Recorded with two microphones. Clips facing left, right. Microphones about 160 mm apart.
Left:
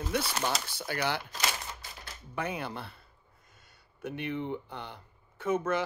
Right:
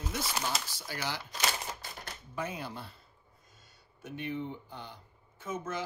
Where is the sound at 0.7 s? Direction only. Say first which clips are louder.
Left 6 dB; 60° left (ahead or behind).